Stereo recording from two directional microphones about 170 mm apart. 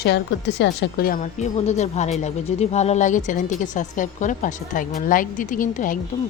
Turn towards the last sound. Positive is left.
turn(degrees=50)  # may be behind; listen again after turning